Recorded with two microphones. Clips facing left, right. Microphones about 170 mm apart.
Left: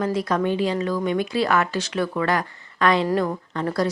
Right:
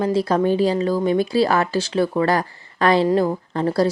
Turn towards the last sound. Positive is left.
turn(degrees=-30)  # may be behind; listen again after turning